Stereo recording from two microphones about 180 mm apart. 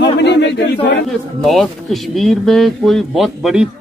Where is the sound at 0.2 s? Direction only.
75° left (ahead or behind).